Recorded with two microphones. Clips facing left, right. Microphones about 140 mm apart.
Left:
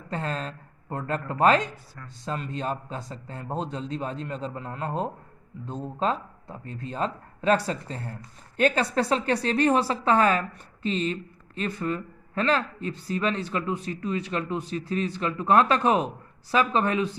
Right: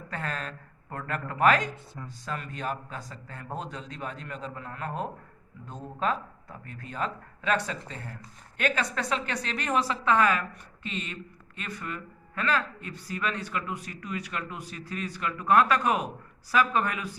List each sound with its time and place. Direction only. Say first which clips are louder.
0.1 s speech: left 4 dB; 25° left (ahead or behind)